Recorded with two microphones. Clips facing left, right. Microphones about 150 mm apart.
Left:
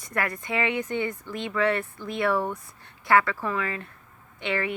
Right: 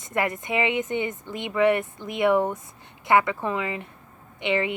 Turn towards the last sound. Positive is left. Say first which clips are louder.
# right 4 dB
turn(degrees=-20)  # may be behind; listen again after turning